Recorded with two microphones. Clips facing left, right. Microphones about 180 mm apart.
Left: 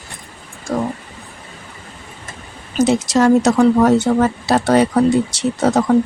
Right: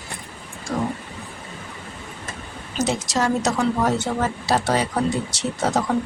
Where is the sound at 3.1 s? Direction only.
60° left (ahead or behind).